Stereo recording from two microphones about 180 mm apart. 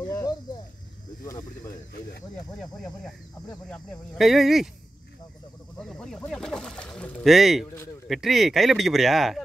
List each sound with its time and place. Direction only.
0.0 s cricket: 20° left (ahead or behind)
3.7 s speech: centre (ahead or behind)
5.8 s speech: centre (ahead or behind)